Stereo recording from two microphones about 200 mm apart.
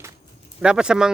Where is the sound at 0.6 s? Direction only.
5° right (ahead or behind).